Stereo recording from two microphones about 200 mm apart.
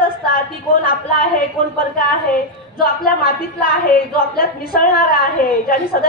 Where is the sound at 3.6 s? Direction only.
45° left (ahead or behind).